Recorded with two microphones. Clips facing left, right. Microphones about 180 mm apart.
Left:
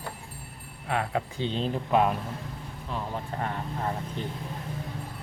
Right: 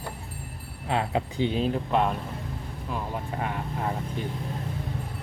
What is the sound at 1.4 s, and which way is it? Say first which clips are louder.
Speech: right 7 dB; 10° right (ahead or behind).